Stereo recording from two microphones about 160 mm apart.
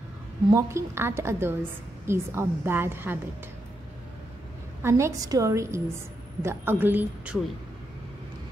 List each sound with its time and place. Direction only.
0.5 s a woman's voice: 20° right (ahead or behind)
4.8 s a woman's voice: 20° right (ahead or behind)